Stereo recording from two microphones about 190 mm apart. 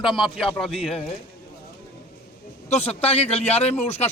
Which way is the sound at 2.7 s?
35° left (ahead or behind).